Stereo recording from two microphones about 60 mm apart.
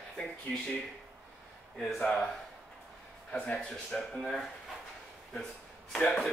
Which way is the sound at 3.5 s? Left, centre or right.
Centre.